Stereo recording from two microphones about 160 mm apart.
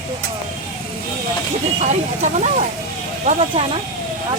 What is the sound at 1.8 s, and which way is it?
Speech, 45° right (ahead or behind).